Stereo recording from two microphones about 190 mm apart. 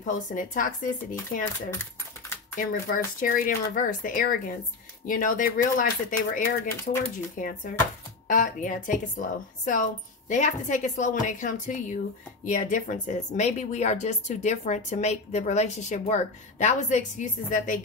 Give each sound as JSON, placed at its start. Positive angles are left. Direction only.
{"t": 0.0, "sound": "speech", "side_deg": 45}
{"t": 1.7, "sound": "typing", "side_deg": 10}
{"t": 2.5, "sound": "speech", "side_deg": 45}